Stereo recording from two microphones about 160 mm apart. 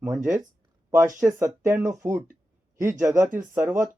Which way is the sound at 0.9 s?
20° right (ahead or behind).